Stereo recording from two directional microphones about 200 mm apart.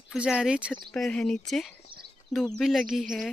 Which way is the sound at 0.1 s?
5° right (ahead or behind).